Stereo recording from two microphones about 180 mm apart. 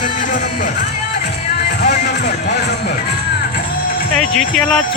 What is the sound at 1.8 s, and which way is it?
Music, 40° left (ahead or behind).